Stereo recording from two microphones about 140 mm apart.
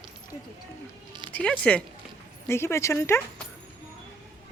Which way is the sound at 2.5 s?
20° left (ahead or behind).